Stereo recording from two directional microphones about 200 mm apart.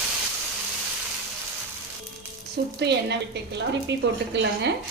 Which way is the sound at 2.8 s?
55° right (ahead or behind).